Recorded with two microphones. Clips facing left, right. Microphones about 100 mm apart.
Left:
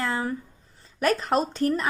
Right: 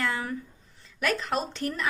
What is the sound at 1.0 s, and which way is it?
Speech, 40° left (ahead or behind).